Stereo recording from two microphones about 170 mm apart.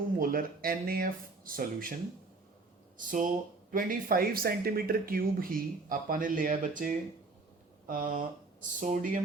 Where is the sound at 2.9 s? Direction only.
50° right (ahead or behind).